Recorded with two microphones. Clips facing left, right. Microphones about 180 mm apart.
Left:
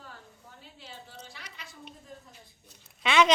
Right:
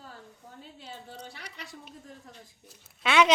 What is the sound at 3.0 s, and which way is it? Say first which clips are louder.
Cough: even; 5° right (ahead or behind).